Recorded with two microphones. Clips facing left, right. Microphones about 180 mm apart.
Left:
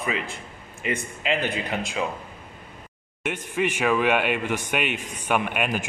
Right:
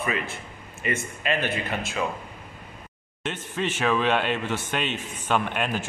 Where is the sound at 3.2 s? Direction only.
10° left (ahead or behind).